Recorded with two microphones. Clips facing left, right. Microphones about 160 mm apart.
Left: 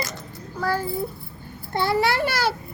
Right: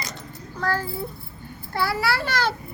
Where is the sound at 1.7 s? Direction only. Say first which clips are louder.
Left 3 dB; 25° left (ahead or behind).